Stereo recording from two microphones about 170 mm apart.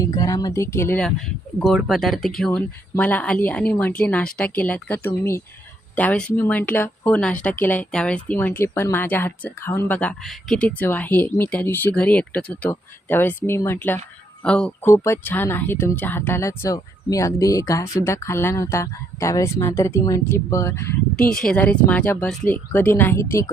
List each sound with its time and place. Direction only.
0.0 s speech: 20° left (ahead or behind)
21.2 s speech: 5° left (ahead or behind)